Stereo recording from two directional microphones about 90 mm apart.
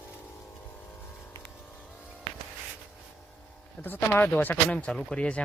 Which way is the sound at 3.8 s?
20° left (ahead or behind).